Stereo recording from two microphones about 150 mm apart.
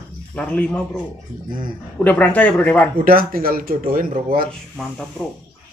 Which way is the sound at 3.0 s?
75° right (ahead or behind).